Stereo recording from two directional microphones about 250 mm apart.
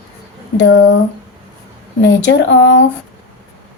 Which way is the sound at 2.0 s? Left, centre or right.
Left.